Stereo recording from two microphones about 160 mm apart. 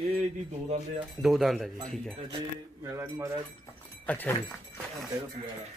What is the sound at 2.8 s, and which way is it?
Speech, 15° right (ahead or behind).